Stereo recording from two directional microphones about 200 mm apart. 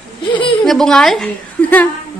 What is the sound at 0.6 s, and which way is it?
A woman's voice, centre (ahead or behind).